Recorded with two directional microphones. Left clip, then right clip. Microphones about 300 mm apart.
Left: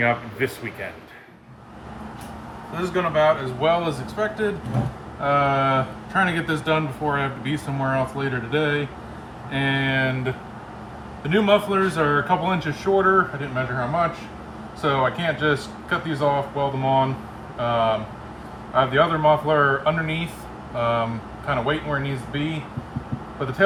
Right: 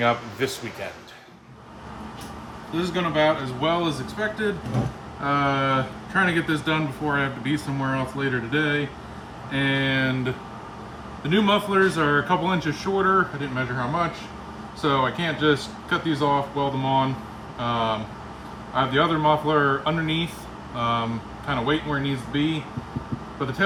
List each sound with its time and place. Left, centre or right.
0.0 s speech: centre
2.7 s speech: centre